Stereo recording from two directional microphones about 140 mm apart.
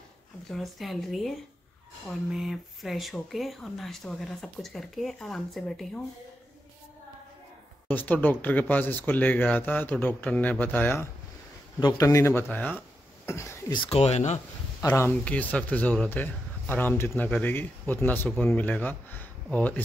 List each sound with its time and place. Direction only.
0.5 s speech: centre (ahead or behind)
2.3 s speech: centre (ahead or behind)
7.9 s speech: 10° left (ahead or behind)
13.8 s speech: 50° left (ahead or behind)
14.9 s speech: 15° left (ahead or behind)